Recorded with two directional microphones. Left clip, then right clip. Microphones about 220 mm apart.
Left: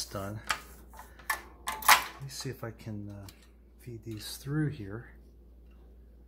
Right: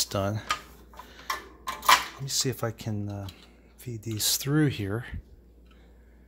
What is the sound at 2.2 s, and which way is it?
Speech, 55° right (ahead or behind).